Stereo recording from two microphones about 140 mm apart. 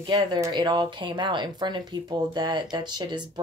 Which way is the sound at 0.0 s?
30° right (ahead or behind).